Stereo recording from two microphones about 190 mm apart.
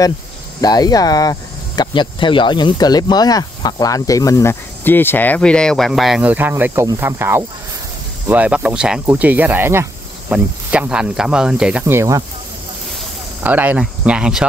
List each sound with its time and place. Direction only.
0.6 s speech: 20° left (ahead or behind); by 12.2 s 15° right (ahead or behind)
13.4 s speech: 10° right (ahead or behind)